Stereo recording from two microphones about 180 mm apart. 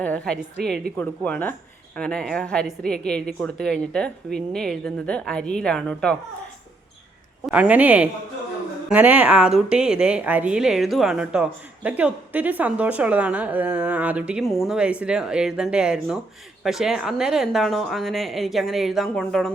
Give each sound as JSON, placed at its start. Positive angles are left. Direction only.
{"t": 0.0, "sound": "a woman's voice", "side_deg": 5}
{"t": 7.4, "sound": "a woman's voice", "side_deg": -5}